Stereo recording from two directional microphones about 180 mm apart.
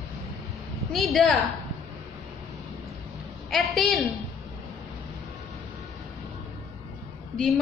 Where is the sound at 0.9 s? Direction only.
Centre (ahead or behind).